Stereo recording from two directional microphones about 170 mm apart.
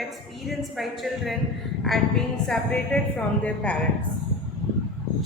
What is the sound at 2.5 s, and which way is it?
A woman's voice, 5° left (ahead or behind).